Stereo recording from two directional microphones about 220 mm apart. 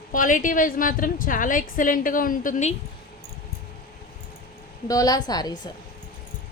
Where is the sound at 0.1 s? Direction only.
35° left (ahead or behind).